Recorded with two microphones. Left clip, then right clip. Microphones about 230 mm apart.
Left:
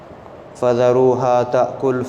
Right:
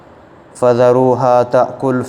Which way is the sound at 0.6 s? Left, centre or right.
Right.